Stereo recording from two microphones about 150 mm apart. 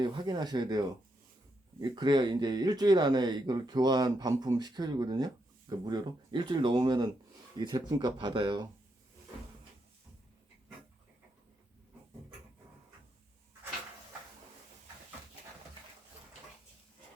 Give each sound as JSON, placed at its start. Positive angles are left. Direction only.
{"t": 0.0, "sound": "speech", "side_deg": -30}